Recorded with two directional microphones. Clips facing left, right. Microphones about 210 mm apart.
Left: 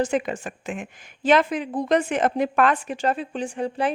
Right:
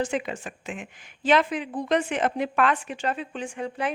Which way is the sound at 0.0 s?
45° left (ahead or behind).